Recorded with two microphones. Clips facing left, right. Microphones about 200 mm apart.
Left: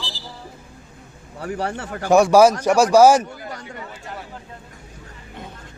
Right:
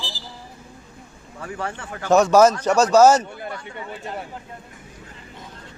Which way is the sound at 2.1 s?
10° left (ahead or behind).